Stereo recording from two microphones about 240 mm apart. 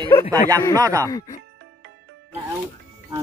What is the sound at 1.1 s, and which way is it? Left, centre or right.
Speech, centre.